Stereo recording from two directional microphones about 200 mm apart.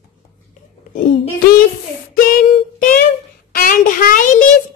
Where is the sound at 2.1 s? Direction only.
45° left (ahead or behind).